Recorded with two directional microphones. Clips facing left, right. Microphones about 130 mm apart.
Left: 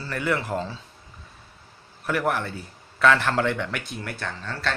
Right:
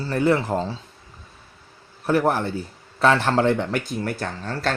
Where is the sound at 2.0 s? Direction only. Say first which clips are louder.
Right 5 dB; 30° right (ahead or behind).